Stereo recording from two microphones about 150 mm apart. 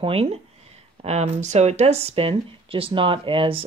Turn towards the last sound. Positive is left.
turn(degrees=-35)  # may be behind; listen again after turning